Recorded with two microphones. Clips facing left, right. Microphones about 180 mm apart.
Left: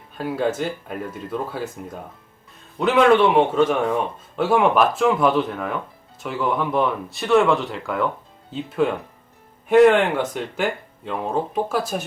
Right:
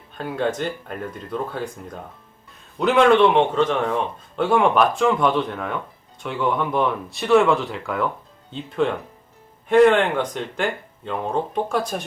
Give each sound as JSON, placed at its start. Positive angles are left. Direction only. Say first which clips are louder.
{"t": 0.1, "sound": "speech", "louder": "left 1 dB", "side_deg": 5}